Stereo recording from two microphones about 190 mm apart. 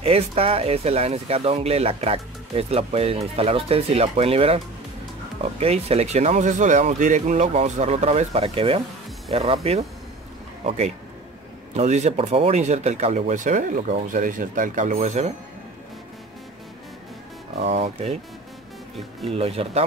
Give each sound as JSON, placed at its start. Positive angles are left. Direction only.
{"t": 0.0, "sound": "speech", "side_deg": -30}
{"t": 11.7, "sound": "speech", "side_deg": -35}
{"t": 17.6, "sound": "speech", "side_deg": -35}
{"t": 19.3, "sound": "speech", "side_deg": -30}